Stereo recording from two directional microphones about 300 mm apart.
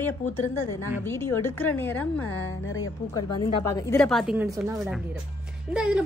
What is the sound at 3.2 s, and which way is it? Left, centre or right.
A woman's voice, centre.